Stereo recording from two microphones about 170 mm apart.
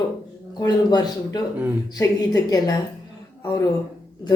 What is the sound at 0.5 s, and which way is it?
A woman's voice, 25° left (ahead or behind).